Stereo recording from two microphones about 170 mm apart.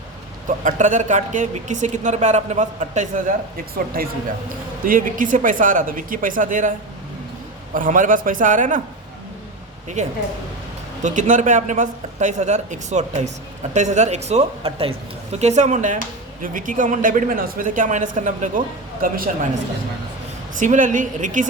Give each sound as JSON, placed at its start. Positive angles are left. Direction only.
{"t": 0.4, "sound": "speech", "side_deg": -45}
{"t": 4.9, "sound": "speech", "side_deg": -50}
{"t": 10.0, "sound": "speech", "side_deg": -45}
{"t": 20.6, "sound": "speech", "side_deg": -50}